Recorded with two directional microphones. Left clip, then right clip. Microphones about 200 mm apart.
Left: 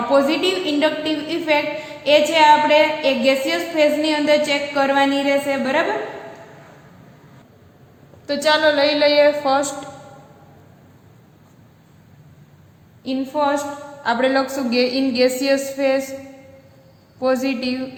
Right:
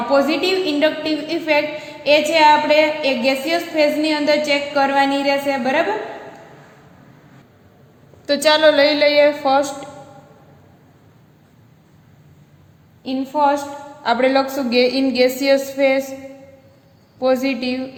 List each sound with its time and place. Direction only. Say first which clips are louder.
0.1 s a woman's voice: right 1 dB; 20° right (ahead or behind)
8.3 s a woman's voice: right 3 dB; 35° right (ahead or behind); by 9.7 s 15° right (ahead or behind)
13.1 s a woman's voice: right 3 dB; 15° right (ahead or behind)
17.2 s a woman's voice: right 2 dB; 15° right (ahead or behind)